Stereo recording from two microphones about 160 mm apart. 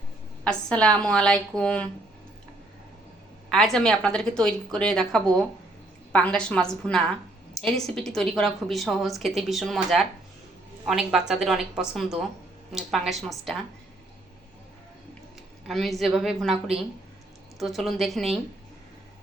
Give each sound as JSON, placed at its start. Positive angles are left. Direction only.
{"t": 0.4, "sound": "a woman's voice", "side_deg": 5}
{"t": 3.5, "sound": "a woman's voice", "side_deg": 5}
{"t": 15.6, "sound": "a woman's voice", "side_deg": 0}